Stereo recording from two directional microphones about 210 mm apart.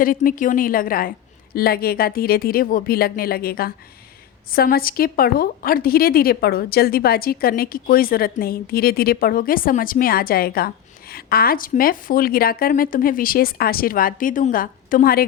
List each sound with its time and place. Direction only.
0.0 s a woman's voice: 40° left (ahead or behind)